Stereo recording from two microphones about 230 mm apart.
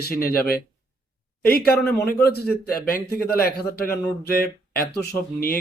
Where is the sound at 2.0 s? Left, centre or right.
Left.